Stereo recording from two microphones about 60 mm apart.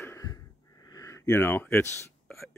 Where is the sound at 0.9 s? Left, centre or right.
Left.